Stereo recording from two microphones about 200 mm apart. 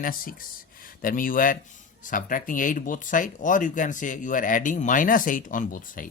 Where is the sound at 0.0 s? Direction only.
45° left (ahead or behind).